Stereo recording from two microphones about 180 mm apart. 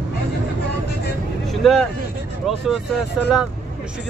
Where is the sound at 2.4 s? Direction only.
Centre (ahead or behind).